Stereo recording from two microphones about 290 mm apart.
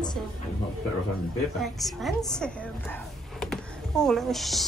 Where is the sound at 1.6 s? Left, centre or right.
Centre.